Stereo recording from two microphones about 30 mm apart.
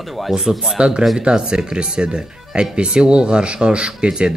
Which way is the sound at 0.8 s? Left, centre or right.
Right.